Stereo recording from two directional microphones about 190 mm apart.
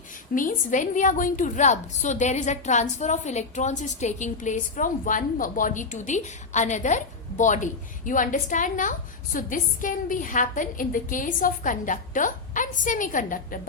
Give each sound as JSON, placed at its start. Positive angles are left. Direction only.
{"t": 0.3, "sound": "a woman's voice", "side_deg": 45}